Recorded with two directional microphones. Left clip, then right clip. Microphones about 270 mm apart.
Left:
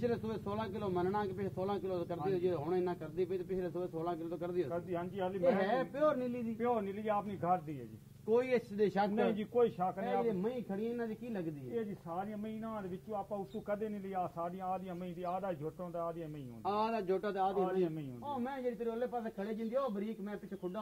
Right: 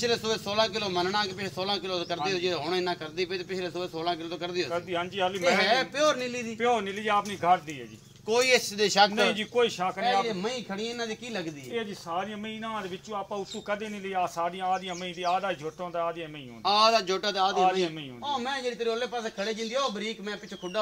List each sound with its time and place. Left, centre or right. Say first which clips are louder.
0.0 s a man's voice: right 10 dB; centre
6.6 s speech: right 9 dB; centre
8.3 s a man's voice: right 9 dB; centre
9.4 s speech: right 6 dB; centre
10.0 s a man's voice: right 11 dB; right
13.7 s speech: right 6 dB; centre
16.6 s a man's voice: right 13 dB; centre